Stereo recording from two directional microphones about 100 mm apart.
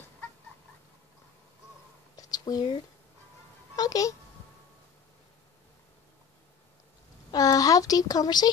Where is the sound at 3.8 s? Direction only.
35° left (ahead or behind).